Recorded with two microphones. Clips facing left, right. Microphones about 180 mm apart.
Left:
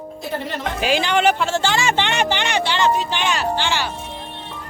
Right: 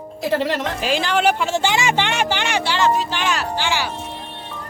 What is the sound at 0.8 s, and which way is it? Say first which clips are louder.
Speech: left 4 dB; centre (ahead or behind).